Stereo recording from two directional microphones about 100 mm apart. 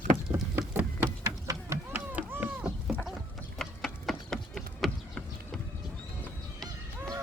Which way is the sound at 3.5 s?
5° left (ahead or behind).